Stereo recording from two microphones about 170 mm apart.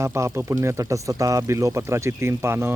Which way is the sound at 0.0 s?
15° right (ahead or behind).